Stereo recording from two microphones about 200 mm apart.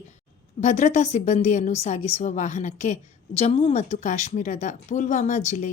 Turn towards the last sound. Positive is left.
turn(degrees=35)  # may be behind; listen again after turning